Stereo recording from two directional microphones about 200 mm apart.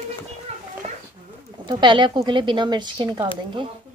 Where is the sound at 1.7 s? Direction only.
25° right (ahead or behind).